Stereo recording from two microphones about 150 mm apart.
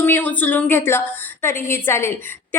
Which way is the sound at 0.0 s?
10° left (ahead or behind).